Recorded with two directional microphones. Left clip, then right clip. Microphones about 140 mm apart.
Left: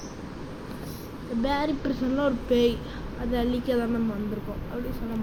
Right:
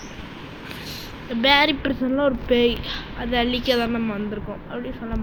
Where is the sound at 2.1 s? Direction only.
5° right (ahead or behind).